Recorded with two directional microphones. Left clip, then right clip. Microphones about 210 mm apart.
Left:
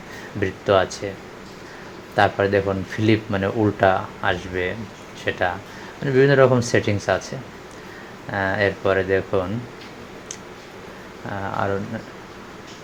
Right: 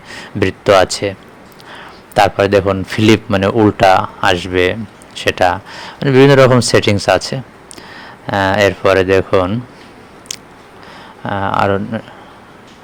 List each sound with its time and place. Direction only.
0.3 s a man's voice: 35° right (ahead or behind)
2.1 s a man's voice: 40° right (ahead or behind)
11.3 s a man's voice: 35° right (ahead or behind)